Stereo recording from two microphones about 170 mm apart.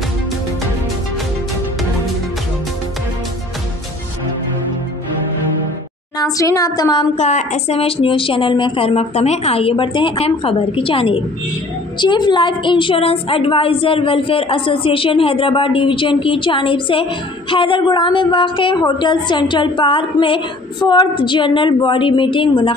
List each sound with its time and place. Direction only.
6.1 s a woman's voice: 20° left (ahead or behind)
7.2 s a woman's voice: 40° left (ahead or behind)